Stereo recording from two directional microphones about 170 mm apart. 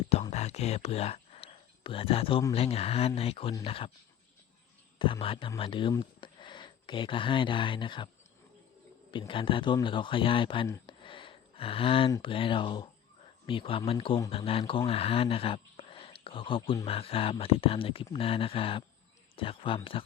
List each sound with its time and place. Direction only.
0.1 s speech: 40° left (ahead or behind)
4.9 s speech: 30° left (ahead or behind)
9.1 s speech: 30° left (ahead or behind)
10.8 s a sound: 30° left (ahead or behind)
12.2 s speech: 30° left (ahead or behind)